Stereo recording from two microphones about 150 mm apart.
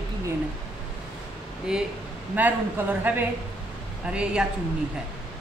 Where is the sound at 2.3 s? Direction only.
10° right (ahead or behind).